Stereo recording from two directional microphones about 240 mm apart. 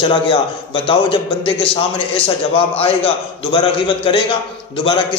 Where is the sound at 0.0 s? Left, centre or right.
Left.